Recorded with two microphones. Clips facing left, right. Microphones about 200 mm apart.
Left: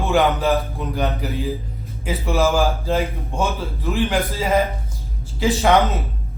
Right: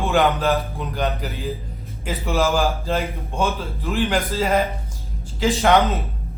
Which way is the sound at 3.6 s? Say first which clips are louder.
Left 1 dB; centre (ahead or behind).